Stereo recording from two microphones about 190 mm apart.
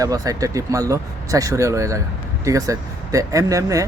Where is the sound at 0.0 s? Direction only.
20° right (ahead or behind).